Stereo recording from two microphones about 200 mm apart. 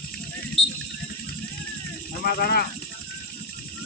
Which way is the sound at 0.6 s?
Centre (ahead or behind).